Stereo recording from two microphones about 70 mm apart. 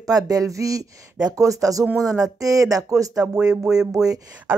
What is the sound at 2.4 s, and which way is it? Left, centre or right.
Speech, right.